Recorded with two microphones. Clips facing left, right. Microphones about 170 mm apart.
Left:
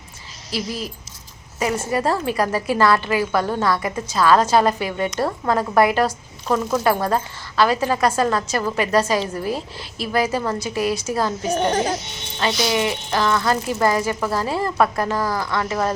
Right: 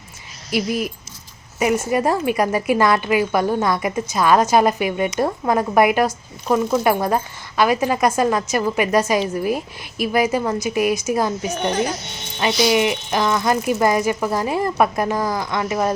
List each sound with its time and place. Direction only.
0.5 s a woman's voice: 15° right (ahead or behind)
11.5 s a woman's voice: 40° left (ahead or behind)
12.6 s a woman's voice: 15° right (ahead or behind)